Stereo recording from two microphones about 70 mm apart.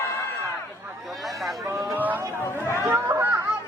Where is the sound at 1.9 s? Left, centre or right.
Right.